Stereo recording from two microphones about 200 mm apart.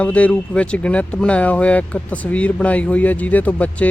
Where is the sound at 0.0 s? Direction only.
5° left (ahead or behind).